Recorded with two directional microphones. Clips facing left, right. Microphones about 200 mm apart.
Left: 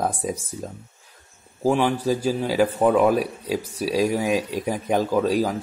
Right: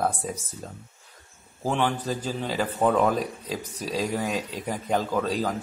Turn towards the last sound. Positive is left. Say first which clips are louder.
# left 5 dB
turn(degrees=10)  # may be behind; listen again after turning